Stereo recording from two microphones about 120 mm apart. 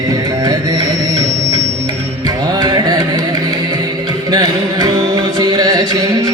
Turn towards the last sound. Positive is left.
turn(degrees=-30)  # may be behind; listen again after turning